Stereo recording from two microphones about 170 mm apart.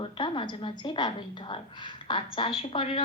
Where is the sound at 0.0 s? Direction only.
30° left (ahead or behind).